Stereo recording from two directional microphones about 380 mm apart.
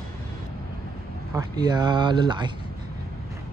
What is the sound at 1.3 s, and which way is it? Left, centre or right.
Speech, centre.